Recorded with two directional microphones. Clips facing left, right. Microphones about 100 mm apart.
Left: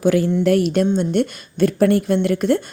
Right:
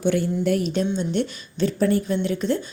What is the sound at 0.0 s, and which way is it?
A woman's voice, 90° left.